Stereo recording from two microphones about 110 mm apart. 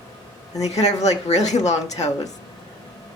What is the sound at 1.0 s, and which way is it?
Speech, 90° left.